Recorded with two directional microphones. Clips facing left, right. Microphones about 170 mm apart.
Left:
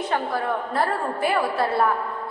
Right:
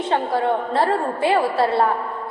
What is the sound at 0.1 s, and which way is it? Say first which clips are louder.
A woman's voice: right 6 dB; 30° right (ahead or behind).